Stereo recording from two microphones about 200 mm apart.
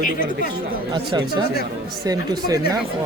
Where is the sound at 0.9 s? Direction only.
20° right (ahead or behind).